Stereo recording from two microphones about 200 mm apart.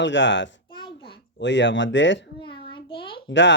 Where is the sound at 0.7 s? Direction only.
25° left (ahead or behind).